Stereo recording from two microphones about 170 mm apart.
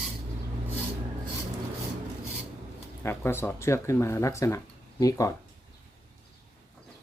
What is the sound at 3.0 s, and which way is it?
Speech, 15° left (ahead or behind).